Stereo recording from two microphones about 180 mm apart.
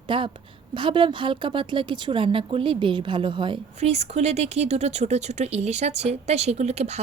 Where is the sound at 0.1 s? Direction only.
30° right (ahead or behind).